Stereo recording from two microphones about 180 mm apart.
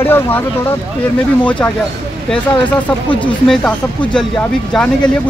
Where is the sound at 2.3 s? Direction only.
10° left (ahead or behind).